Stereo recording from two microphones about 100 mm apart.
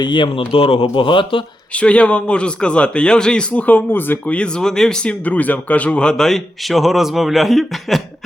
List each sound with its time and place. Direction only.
0.0 s a man's voice: 50° left (ahead or behind)
1.7 s a man's voice: 10° left (ahead or behind)